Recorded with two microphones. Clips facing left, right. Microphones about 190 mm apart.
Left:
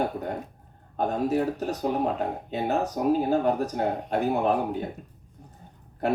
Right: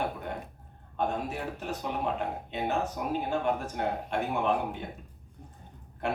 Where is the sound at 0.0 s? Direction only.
40° left (ahead or behind).